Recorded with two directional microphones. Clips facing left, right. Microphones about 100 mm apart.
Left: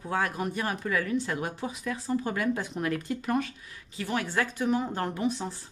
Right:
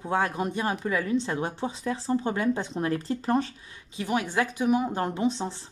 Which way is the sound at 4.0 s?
20° right (ahead or behind).